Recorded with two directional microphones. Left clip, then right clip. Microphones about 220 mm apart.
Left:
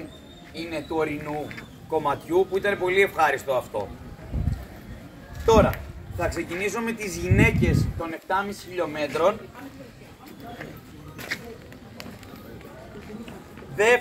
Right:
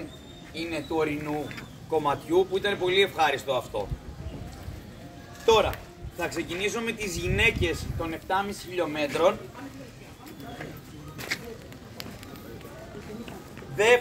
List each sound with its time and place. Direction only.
0.6 s a man's voice: 20° right (ahead or behind)
5.6 s speech: 15° right (ahead or behind)